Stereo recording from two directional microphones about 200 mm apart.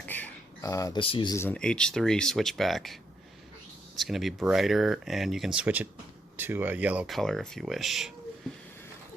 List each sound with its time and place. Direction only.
0.0 s a sound: 10° left (ahead or behind)
1.0 s speech: 25° left (ahead or behind); by 3.0 s centre (ahead or behind)
4.0 s speech: centre (ahead or behind)